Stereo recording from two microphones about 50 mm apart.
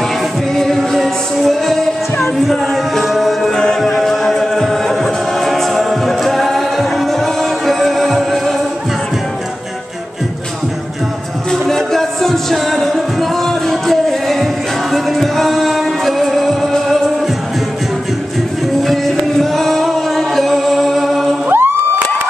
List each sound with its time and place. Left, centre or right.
0.6 s music: centre
3.5 s music: centre
11.5 s music: centre
18.8 s music: centre
21.5 s music: right